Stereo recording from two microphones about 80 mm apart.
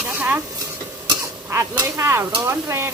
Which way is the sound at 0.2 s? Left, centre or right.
Right.